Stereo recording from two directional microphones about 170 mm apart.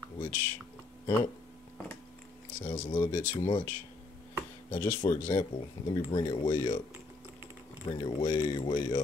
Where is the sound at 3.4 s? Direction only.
30° left (ahead or behind).